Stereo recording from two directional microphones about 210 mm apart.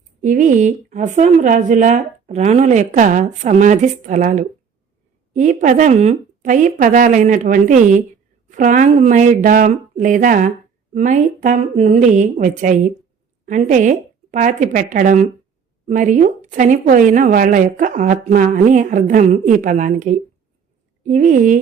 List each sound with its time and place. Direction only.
0.2 s a woman's voice: 35° right (ahead or behind)